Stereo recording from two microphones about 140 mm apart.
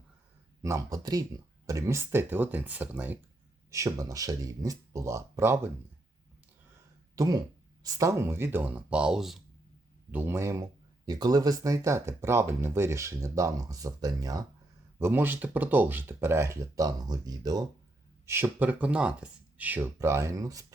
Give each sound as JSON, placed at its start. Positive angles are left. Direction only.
{"t": 0.6, "sound": "speech", "side_deg": -25}
{"t": 3.7, "sound": "a man's voice", "side_deg": -20}
{"t": 7.2, "sound": "a man's voice", "side_deg": -30}
{"t": 10.1, "sound": "a man's voice", "side_deg": -15}
{"t": 14.9, "sound": "speech", "side_deg": -15}
{"t": 18.3, "sound": "speech", "side_deg": -15}